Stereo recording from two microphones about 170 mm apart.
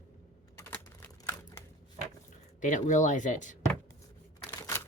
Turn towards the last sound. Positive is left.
turn(degrees=15)  # may be behind; listen again after turning